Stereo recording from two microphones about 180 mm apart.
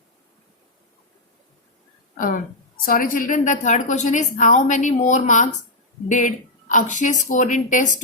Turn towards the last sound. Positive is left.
turn(degrees=45)  # may be behind; listen again after turning